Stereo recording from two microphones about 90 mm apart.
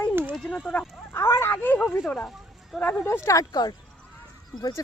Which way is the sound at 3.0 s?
35° left (ahead or behind).